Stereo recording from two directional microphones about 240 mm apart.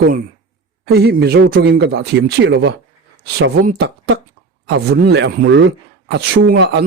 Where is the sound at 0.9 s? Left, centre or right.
Right.